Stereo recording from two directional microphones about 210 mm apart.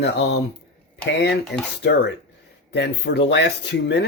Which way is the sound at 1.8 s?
55° left (ahead or behind).